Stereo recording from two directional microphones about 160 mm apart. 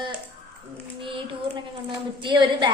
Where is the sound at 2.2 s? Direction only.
30° right (ahead or behind).